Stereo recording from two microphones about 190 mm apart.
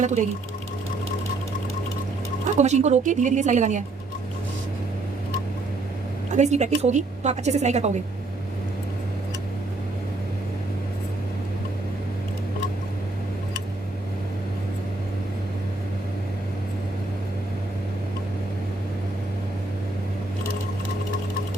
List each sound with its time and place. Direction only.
0.0 s a woman's voice: 40° right (ahead or behind)
2.6 s a woman's voice: 35° right (ahead or behind)
6.3 s a woman's voice: 35° right (ahead or behind)